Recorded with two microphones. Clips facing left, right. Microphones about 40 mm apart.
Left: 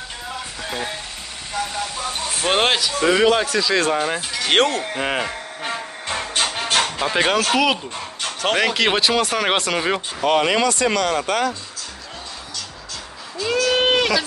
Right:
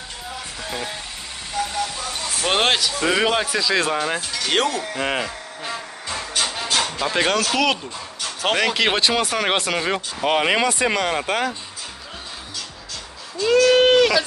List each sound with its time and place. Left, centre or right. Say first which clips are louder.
2.4 s speech: left 1 dB; centre
4.5 s speech: left 4 dB; left
4.9 s speech: left 1 dB; centre
5.6 s a sound: left 2 dB; left
7.0 s speech: left 1 dB; left
7.5 s speech: left 2 dB; centre
10.2 s speech: left 1 dB; centre
13.4 s a sound: right 4 dB; centre